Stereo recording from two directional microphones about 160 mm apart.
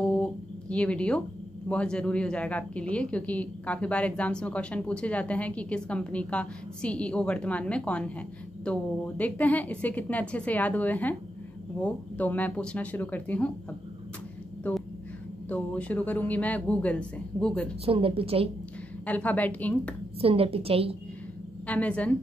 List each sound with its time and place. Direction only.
0.0 s a sound: 5° left (ahead or behind)
1.7 s speech: 5° left (ahead or behind)
15.5 s speech: 10° left (ahead or behind)
17.8 s a woman's voice: 35° right (ahead or behind)
19.0 s speech: 10° left (ahead or behind)
20.2 s a woman's voice: 35° right (ahead or behind)
21.6 s speech: 10° left (ahead or behind)